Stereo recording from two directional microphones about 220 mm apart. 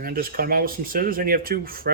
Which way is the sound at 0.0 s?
40° right (ahead or behind).